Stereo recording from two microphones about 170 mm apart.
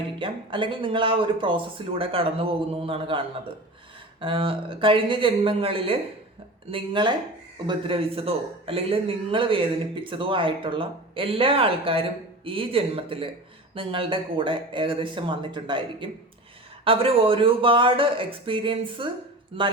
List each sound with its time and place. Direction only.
0.2 s a man's voice: 30° right (ahead or behind)